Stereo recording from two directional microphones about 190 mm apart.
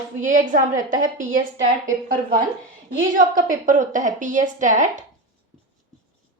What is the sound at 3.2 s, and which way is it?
A woman's voice, 45° right (ahead or behind).